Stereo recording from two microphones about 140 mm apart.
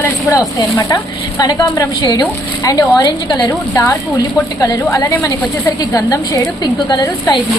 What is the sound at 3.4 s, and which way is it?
Speech, 15° left (ahead or behind).